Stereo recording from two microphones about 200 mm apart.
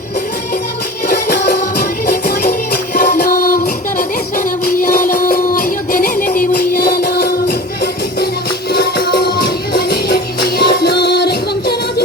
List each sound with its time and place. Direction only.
1.8 s music: 50° left (ahead or behind)
8.7 s music: 50° left (ahead or behind)